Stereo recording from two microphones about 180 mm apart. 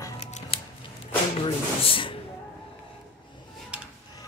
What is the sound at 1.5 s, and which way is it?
Speech, 30° left (ahead or behind).